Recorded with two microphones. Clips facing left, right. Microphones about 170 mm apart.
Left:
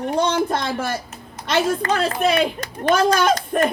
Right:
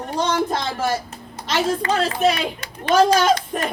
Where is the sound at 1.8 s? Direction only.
55° left (ahead or behind).